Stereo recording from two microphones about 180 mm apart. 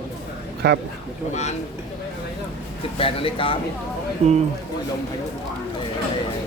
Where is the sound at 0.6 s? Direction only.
65° right (ahead or behind).